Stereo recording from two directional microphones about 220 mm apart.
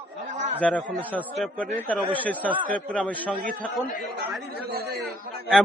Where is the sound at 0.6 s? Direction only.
Centre (ahead or behind).